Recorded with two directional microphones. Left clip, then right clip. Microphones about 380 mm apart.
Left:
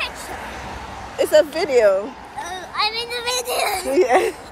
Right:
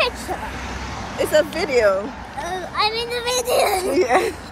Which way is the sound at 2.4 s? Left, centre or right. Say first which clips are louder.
Right 2 dB; centre.